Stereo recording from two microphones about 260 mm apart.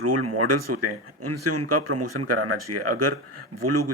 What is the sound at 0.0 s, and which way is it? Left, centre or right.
Speech, right.